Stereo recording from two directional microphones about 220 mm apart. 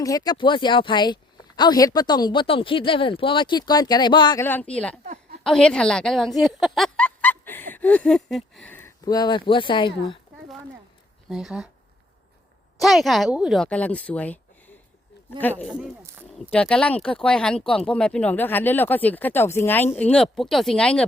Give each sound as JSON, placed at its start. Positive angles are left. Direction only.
{"t": 0.0, "sound": "speech", "side_deg": 15}
{"t": 4.4, "sound": "speech", "side_deg": 5}
{"t": 5.0, "sound": "a sound", "side_deg": -35}
{"t": 5.4, "sound": "speech", "side_deg": 5}
{"t": 11.3, "sound": "speech", "side_deg": 0}
{"t": 12.8, "sound": "speech", "side_deg": 0}
{"t": 15.4, "sound": "speech", "side_deg": 10}